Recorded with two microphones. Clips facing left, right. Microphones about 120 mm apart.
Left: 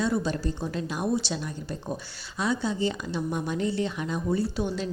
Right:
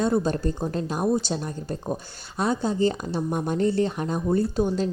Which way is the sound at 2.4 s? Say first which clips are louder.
Right 4 dB; 45° right (ahead or behind).